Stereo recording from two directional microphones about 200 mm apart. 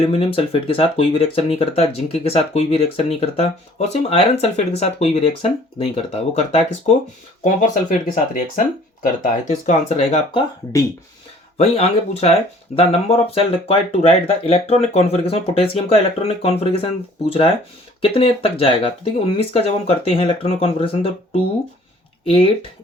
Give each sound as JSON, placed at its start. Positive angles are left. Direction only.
{"t": 0.1, "sound": "speech", "side_deg": 30}
{"t": 11.5, "sound": "speech", "side_deg": 30}